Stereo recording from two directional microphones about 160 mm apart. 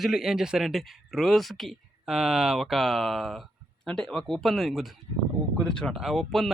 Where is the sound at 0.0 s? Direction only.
Centre (ahead or behind).